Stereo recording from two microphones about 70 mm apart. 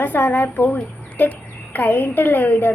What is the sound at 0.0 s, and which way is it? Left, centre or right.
A woman's voice, left.